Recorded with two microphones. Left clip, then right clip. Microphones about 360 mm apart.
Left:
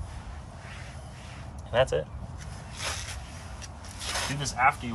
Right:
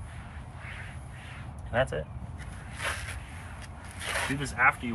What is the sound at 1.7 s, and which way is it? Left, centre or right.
Speech, centre.